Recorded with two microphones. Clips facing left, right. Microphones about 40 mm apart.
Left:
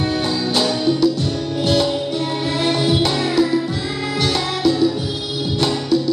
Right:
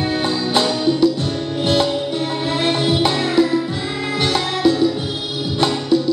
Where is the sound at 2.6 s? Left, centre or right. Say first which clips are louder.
Even; right.